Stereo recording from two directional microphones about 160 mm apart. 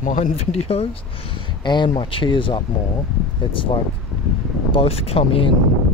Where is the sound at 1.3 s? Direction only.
30° left (ahead or behind).